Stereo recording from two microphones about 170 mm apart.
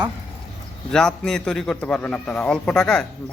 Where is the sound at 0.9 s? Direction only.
5° left (ahead or behind).